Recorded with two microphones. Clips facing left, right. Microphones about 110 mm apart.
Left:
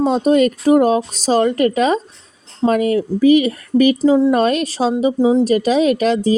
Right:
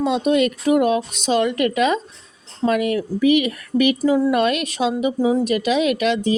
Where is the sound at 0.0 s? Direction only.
40° left (ahead or behind).